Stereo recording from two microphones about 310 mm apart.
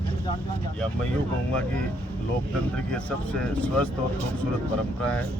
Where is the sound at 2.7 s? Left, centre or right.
Centre.